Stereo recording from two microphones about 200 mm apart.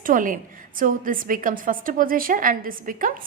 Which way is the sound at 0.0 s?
45° right (ahead or behind).